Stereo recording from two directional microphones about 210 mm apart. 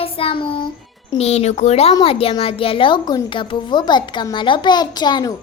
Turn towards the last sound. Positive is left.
turn(degrees=20)  # may be behind; listen again after turning